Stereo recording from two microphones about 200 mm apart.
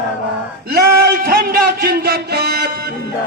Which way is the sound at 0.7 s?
50° right (ahead or behind).